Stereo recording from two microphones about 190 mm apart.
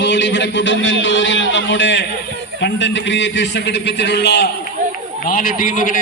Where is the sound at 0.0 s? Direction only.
75° left (ahead or behind).